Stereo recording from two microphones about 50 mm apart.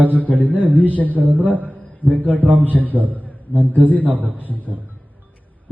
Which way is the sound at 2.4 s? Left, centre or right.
Right.